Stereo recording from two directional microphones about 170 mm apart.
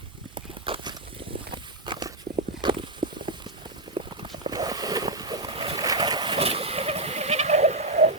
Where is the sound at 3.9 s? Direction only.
25° right (ahead or behind).